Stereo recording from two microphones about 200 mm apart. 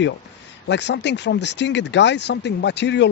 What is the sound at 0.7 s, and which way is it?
Speech, 60° left (ahead or behind).